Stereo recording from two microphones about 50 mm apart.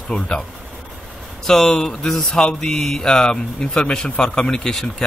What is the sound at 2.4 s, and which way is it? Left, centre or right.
A man's voice, centre.